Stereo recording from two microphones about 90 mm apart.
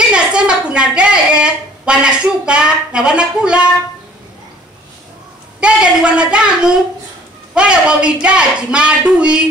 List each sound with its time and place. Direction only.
0.0 s speech: 10° right (ahead or behind)
5.6 s speech: 10° right (ahead or behind)